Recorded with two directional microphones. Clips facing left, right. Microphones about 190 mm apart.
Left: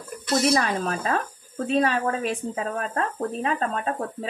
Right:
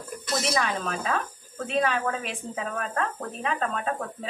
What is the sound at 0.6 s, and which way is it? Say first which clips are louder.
Speech: left 3 dB; 40° left (ahead or behind).